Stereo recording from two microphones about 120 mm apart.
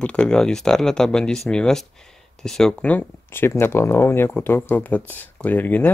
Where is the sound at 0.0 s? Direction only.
10° left (ahead or behind).